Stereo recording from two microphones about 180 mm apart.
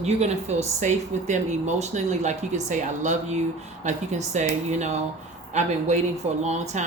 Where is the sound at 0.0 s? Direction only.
40° right (ahead or behind).